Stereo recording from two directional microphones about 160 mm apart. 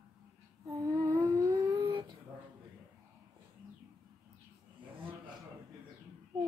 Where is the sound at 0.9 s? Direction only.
20° right (ahead or behind).